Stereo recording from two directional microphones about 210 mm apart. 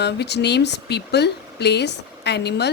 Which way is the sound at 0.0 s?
55° left (ahead or behind).